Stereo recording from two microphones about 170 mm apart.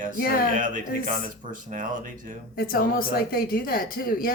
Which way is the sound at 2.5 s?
60° left (ahead or behind).